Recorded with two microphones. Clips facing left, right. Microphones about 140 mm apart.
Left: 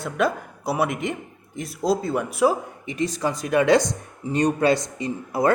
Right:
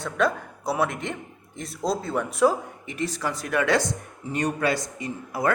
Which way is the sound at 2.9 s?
15° left (ahead or behind).